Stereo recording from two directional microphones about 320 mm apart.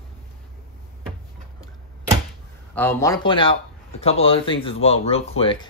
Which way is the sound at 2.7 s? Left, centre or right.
Centre.